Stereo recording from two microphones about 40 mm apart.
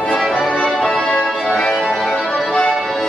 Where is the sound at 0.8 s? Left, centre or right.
Centre.